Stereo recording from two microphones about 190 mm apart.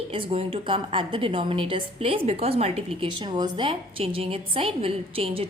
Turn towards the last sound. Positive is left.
turn(degrees=-30)  # may be behind; listen again after turning